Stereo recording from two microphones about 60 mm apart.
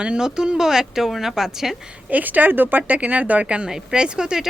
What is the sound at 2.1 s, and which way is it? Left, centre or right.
Speech, right.